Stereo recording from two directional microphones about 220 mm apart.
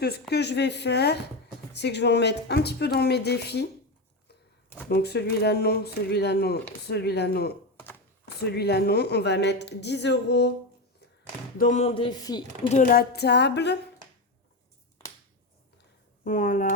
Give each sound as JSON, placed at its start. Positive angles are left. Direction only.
{"t": 0.0, "sound": "speech", "side_deg": 45}
{"t": 4.9, "sound": "speech", "side_deg": 45}
{"t": 11.5, "sound": "speech", "side_deg": 35}
{"t": 12.6, "sound": "speech", "side_deg": 35}
{"t": 16.2, "sound": "speech", "side_deg": 40}